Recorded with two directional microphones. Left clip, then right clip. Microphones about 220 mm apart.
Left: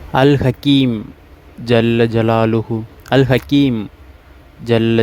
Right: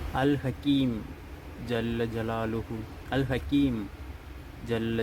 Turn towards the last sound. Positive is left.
turn(degrees=45)  # may be behind; listen again after turning